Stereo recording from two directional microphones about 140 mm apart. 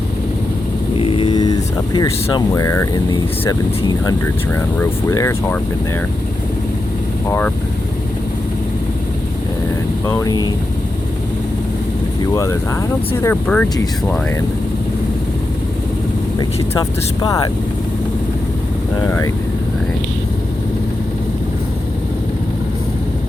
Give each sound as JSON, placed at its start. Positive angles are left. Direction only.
{"t": 0.9, "sound": "speech", "side_deg": 40}
{"t": 4.5, "sound": "speech", "side_deg": 20}
{"t": 7.3, "sound": "speech", "side_deg": 15}
{"t": 10.1, "sound": "speech", "side_deg": 25}
{"t": 12.2, "sound": "speech", "side_deg": 25}
{"t": 13.2, "sound": "speech", "side_deg": 10}
{"t": 16.4, "sound": "speech", "side_deg": 25}
{"t": 18.9, "sound": "speech", "side_deg": 25}